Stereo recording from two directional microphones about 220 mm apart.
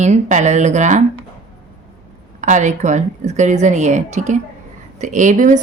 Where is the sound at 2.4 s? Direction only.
35° right (ahead or behind).